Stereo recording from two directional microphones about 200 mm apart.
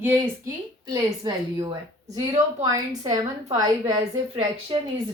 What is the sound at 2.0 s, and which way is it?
Speech, 35° right (ahead or behind).